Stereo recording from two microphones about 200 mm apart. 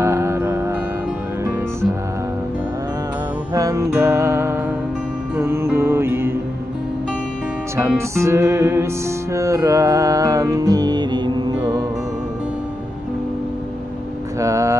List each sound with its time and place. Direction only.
0.0 s music: 15° right (ahead or behind)
3.5 s music: 15° right (ahead or behind)
7.7 s music: 15° right (ahead or behind)
14.4 s vehicle: 15° right (ahead or behind)